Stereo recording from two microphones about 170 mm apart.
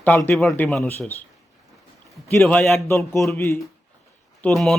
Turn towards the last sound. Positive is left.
turn(degrees=0)  # may be behind; listen again after turning